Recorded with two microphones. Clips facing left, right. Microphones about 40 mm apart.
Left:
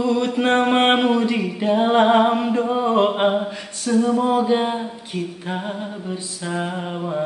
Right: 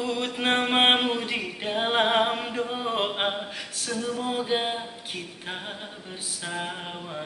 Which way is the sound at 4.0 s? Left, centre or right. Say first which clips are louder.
Left 13 dB; left.